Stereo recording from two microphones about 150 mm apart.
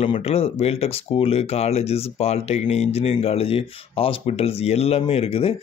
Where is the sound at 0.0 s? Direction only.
40° left (ahead or behind).